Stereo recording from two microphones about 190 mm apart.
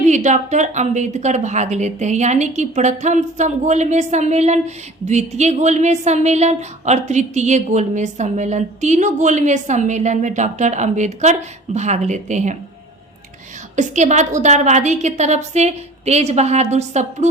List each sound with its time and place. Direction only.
0.0 s a woman's voice: 40° right (ahead or behind)
13.7 s a woman's voice: 40° right (ahead or behind)